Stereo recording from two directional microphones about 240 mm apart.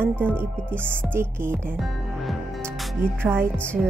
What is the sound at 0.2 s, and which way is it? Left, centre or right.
Music, centre.